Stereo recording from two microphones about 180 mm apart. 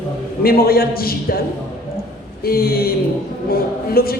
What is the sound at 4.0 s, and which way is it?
Speech, 55° left (ahead or behind).